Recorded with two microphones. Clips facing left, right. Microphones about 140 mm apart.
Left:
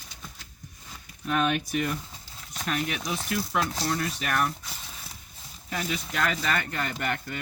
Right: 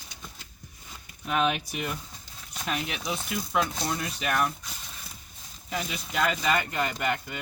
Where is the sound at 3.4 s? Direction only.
Centre (ahead or behind).